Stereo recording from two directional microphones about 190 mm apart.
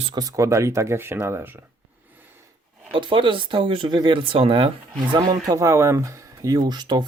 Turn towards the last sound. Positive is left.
turn(degrees=-20)  # may be behind; listen again after turning